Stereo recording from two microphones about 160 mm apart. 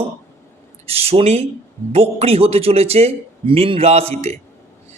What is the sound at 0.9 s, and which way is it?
A man's voice, 40° right (ahead or behind).